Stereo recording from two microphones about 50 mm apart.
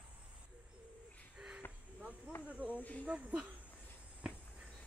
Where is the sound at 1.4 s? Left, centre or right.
Right.